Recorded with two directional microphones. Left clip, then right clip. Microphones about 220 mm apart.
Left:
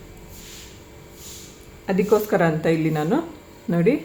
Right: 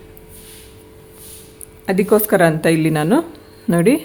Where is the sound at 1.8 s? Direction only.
50° right (ahead or behind).